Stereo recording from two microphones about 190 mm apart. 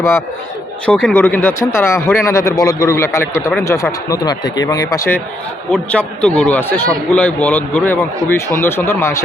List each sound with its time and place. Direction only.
0.9 s speech: 5° left (ahead or behind)